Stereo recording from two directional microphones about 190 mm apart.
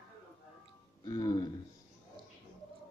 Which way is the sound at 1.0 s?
20° left (ahead or behind).